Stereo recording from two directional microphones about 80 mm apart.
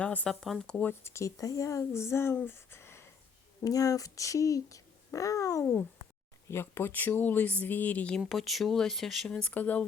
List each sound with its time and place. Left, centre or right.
0.0 s speech: centre
0.3 s speech: centre
0.7 s speech: centre
1.0 s speech: left
2.5 s a sound: left
3.6 s speech: left
6.5 s speech: left
8.2 s speech: centre
9.3 s speech: centre